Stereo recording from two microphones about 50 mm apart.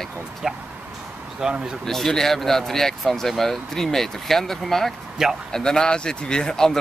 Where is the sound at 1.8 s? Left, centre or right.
Centre.